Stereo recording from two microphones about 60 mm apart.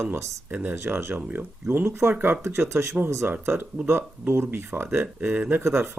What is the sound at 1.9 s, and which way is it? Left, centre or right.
Speech, right.